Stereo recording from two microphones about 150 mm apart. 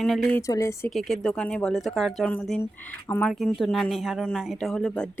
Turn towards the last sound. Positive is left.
turn(degrees=5)  # may be behind; listen again after turning